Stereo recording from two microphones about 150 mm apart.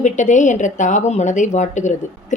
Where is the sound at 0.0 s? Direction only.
55° left (ahead or behind).